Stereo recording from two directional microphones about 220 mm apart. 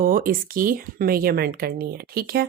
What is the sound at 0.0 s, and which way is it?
Speech, 40° right (ahead or behind).